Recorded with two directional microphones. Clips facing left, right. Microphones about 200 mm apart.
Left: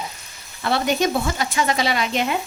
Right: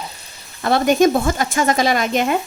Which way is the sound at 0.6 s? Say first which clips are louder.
Right 6 dB; 45° right (ahead or behind).